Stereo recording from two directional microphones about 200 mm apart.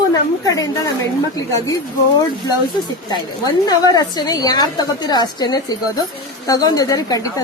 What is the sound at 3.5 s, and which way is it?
A woman's voice, 20° left (ahead or behind).